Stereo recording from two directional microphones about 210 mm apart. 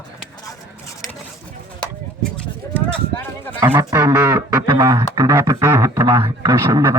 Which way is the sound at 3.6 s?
10° right (ahead or behind).